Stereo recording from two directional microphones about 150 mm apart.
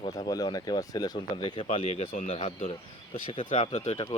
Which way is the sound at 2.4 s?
40° left (ahead or behind).